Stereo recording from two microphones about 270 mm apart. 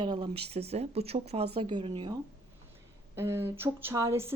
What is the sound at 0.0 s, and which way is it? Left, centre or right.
Speech, centre.